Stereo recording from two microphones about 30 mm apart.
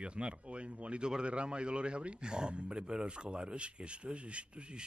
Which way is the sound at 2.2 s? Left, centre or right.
Right.